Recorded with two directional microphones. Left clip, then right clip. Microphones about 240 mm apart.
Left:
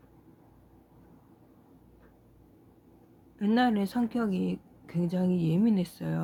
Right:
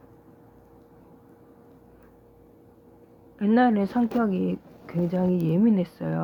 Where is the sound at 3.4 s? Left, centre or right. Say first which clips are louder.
Right 5 dB; centre.